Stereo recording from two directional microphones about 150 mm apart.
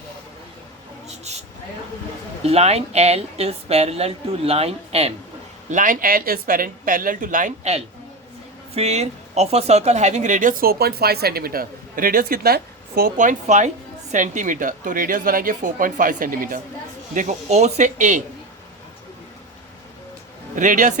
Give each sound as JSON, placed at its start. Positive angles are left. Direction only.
{"t": 1.0, "sound": "a sound", "side_deg": -45}
{"t": 2.4, "sound": "speech", "side_deg": -45}
{"t": 5.7, "sound": "speech", "side_deg": -65}
{"t": 17.2, "sound": "speech", "side_deg": -50}
{"t": 20.6, "sound": "speech", "side_deg": -55}